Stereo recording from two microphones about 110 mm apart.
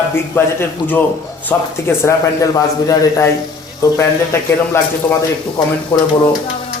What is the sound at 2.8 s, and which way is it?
A man's voice, 30° left (ahead or behind).